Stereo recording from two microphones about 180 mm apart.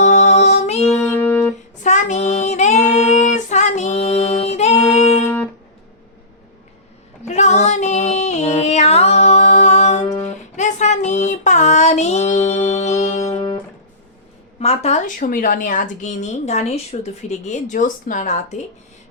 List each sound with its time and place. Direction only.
0.0 s music: 40° left (ahead or behind)
0.9 s music: 10° left (ahead or behind)
1.8 s child singing: 40° left (ahead or behind)
3.0 s music: 40° left (ahead or behind)
5.2 s music: 10° left (ahead or behind)
7.3 s female singing: 40° left (ahead or behind)
10.2 s music: 40° left (ahead or behind)
14.6 s speech: 35° left (ahead or behind)